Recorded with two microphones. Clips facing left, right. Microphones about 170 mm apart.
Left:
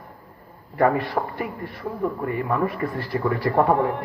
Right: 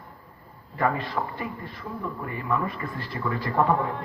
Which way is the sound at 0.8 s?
70° left (ahead or behind).